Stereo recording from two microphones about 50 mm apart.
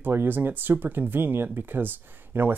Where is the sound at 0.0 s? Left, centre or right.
Right.